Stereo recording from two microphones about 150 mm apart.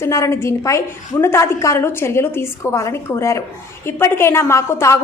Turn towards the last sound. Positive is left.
turn(degrees=20)  # may be behind; listen again after turning